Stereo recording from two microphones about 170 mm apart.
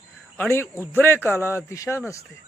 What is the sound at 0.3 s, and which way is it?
Speech, 15° left (ahead or behind).